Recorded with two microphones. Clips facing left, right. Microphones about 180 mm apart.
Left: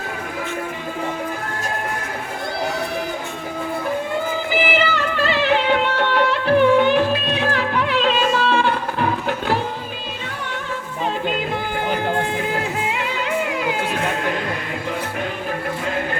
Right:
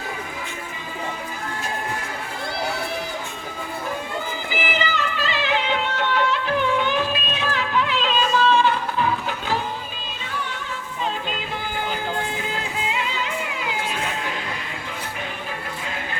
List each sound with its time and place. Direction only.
4.8 s music: 55° left (ahead or behind)
11.9 s music: 55° left (ahead or behind)